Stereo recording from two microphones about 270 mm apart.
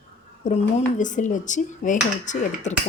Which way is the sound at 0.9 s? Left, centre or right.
Left.